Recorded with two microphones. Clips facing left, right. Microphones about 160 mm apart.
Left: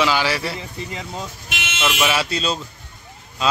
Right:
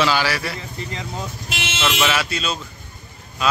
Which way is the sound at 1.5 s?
30° right (ahead or behind).